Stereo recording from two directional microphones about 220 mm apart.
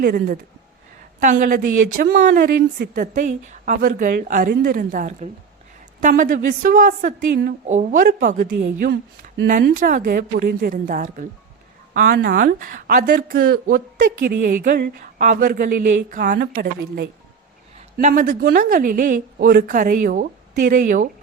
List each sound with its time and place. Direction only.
0.0 s a woman's voice: 45° right (ahead or behind)
8.5 s a woman's voice: 50° right (ahead or behind)